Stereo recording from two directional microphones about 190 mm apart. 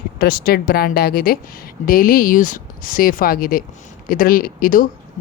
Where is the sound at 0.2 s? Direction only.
55° left (ahead or behind).